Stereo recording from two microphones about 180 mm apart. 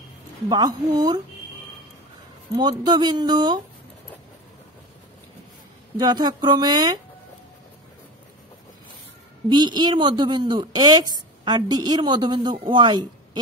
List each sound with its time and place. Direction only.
0.5 s speech: 20° right (ahead or behind)
2.5 s speech: 25° right (ahead or behind)
5.9 s speech: 25° right (ahead or behind)
9.5 s speech: 25° right (ahead or behind)